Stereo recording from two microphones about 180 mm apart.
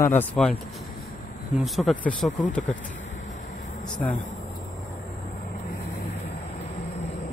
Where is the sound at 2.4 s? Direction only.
45° left (ahead or behind).